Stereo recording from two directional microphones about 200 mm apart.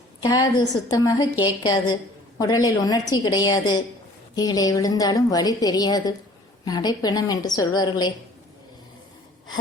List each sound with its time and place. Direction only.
0.2 s a woman's voice: 20° left (ahead or behind)